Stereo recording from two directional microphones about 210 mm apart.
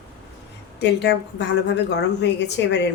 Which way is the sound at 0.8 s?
55° left (ahead or behind).